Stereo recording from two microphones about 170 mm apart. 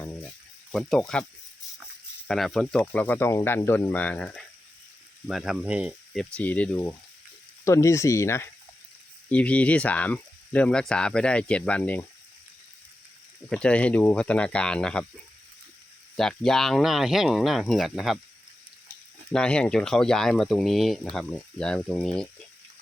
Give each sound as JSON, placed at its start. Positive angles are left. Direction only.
{"t": 0.7, "sound": "speech", "side_deg": 0}
{"t": 6.3, "sound": "speech", "side_deg": 10}
{"t": 13.5, "sound": "speech", "side_deg": 5}
{"t": 16.1, "sound": "speech", "side_deg": 0}
{"t": 19.3, "sound": "speech", "side_deg": 5}